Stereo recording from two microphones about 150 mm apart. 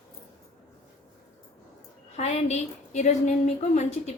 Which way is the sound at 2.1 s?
45° left (ahead or behind).